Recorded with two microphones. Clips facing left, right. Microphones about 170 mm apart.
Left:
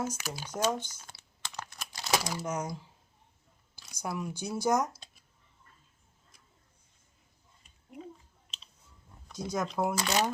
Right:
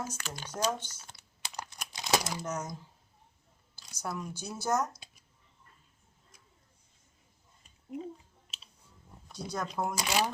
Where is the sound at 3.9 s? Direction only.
10° left (ahead or behind).